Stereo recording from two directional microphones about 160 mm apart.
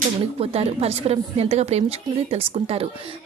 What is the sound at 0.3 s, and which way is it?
Speech, 40° right (ahead or behind).